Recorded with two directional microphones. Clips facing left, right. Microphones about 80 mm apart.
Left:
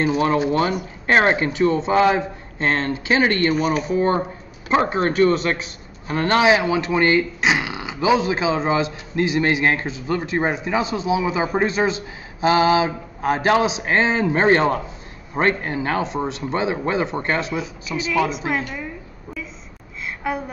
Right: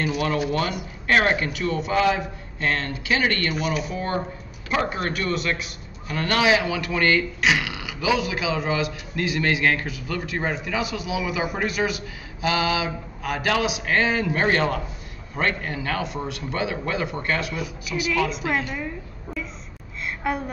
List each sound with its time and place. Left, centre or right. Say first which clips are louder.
0.0 s speech: left 5 dB; left
3.5 s speech: left 6 dB; left
20.2 s a sound: left 1 dB; centre